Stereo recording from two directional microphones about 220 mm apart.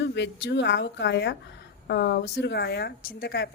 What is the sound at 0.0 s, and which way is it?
Speech, 50° left (ahead or behind).